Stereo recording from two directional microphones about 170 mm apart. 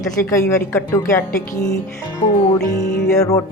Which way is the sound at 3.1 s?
20° left (ahead or behind).